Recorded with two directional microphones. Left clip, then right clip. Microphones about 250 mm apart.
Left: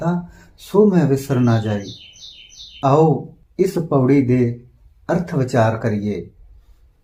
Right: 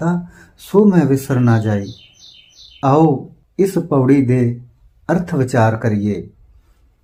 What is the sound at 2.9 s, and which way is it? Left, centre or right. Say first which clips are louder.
Speech: right 2 dB; right.